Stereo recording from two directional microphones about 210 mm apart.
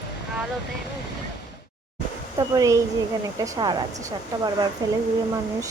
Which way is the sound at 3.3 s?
20° right (ahead or behind).